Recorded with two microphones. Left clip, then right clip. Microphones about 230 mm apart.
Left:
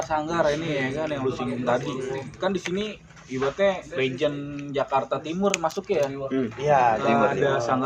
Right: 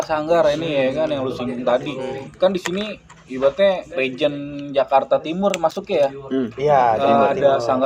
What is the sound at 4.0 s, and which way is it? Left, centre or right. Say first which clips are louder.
Speech: right 5 dB; right.